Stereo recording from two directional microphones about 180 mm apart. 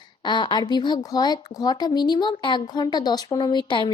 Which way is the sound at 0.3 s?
25° left (ahead or behind).